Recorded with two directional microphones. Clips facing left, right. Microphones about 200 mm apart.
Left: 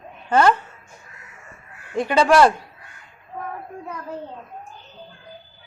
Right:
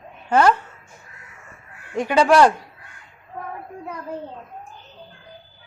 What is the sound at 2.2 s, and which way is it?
Speech, centre (ahead or behind).